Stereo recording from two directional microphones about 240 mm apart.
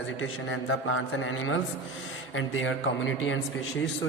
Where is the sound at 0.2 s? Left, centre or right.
Left.